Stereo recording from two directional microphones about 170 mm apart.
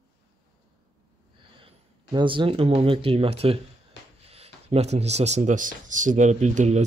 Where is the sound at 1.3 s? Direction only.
30° right (ahead or behind).